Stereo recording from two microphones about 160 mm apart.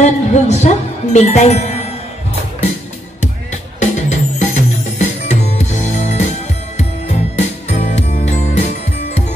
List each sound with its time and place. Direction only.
0.0 s music: 45° left (ahead or behind)
3.8 s music: 45° left (ahead or behind)
7.3 s music: 45° left (ahead or behind)